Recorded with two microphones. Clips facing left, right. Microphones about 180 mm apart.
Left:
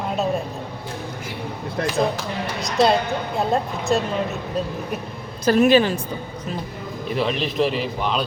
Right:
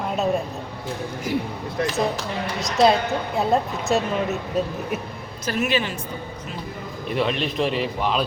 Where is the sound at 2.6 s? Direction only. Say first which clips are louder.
Right 1 dB; centre (ahead or behind).